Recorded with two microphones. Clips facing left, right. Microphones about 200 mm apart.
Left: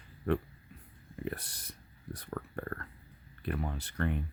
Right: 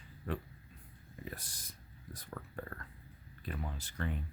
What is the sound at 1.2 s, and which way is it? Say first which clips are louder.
Speech: left 8 dB; 65° left (ahead or behind).